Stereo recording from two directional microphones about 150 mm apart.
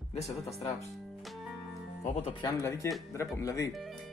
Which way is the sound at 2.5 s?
20° left (ahead or behind).